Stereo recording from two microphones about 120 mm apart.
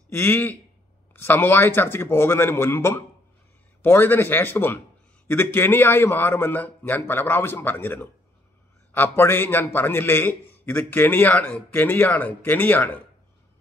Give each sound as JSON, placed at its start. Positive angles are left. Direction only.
{"t": 0.1, "sound": "a man's voice", "side_deg": 15}